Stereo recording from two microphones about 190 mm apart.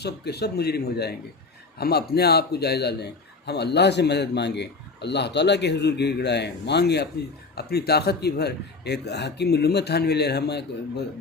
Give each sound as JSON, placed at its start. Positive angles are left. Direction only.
{"t": 0.0, "sound": "a man's voice", "side_deg": 60}